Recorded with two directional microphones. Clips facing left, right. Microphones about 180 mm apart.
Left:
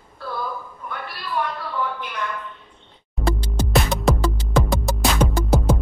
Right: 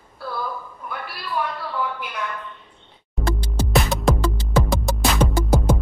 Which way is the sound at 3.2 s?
Centre (ahead or behind).